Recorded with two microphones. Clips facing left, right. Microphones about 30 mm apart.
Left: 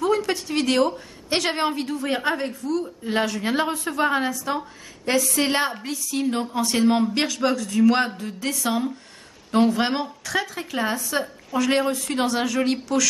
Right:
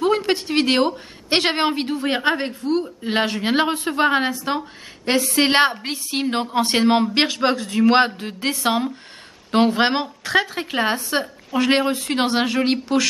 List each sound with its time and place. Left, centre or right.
0.0 s a woman's voice: right